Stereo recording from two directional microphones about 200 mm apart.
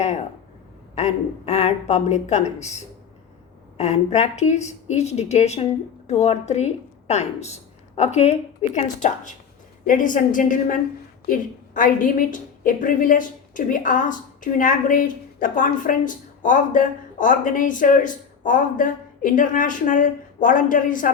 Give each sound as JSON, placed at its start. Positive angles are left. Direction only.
{"t": 0.9, "sound": "a woman's voice", "side_deg": 35}